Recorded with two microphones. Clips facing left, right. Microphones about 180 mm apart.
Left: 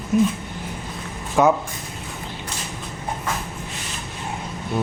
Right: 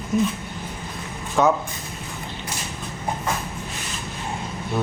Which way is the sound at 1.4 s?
5° left (ahead or behind).